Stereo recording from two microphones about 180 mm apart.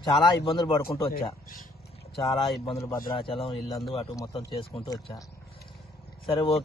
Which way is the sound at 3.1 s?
30° left (ahead or behind).